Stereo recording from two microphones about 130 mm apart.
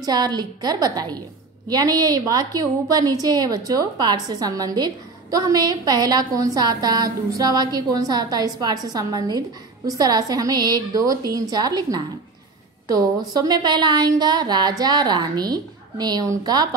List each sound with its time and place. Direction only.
0.0 s a woman's voice: 30° right (ahead or behind)